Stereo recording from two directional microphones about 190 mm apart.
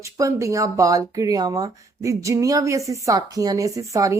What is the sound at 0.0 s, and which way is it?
Speech, 15° right (ahead or behind).